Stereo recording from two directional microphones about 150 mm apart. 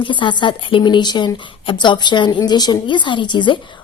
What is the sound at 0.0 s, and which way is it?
Speech, 35° left (ahead or behind).